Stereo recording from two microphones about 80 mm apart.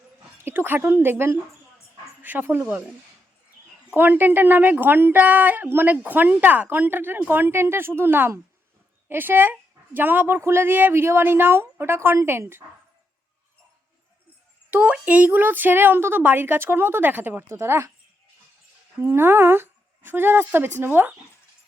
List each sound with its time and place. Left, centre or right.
0.4 s a woman's voice: right
3.9 s a woman's voice: right
14.7 s a woman's voice: centre
17.5 s speech: right
18.9 s a woman's voice: right